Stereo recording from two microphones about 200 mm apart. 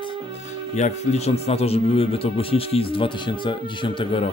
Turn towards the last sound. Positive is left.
turn(degrees=25)  # may be behind; listen again after turning